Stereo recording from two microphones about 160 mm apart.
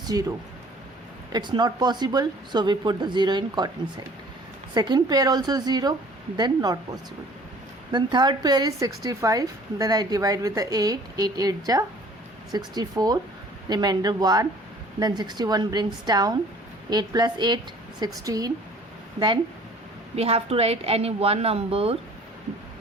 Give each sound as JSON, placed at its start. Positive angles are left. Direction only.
{"t": 0.1, "sound": "a woman's voice", "side_deg": -20}
{"t": 4.7, "sound": "a woman's voice", "side_deg": -25}
{"t": 7.9, "sound": "a woman's voice", "side_deg": -30}
{"t": 20.1, "sound": "a woman's voice", "side_deg": -40}